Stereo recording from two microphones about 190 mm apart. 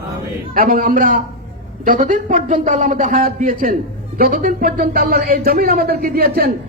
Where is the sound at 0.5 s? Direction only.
50° right (ahead or behind).